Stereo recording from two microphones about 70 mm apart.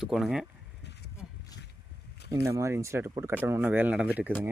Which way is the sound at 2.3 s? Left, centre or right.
Right.